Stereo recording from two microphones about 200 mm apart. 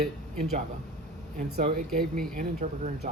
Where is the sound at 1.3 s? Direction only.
40° right (ahead or behind).